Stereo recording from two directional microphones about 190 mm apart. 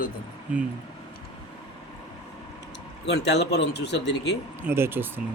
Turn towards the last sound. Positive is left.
turn(degrees=-10)  # may be behind; listen again after turning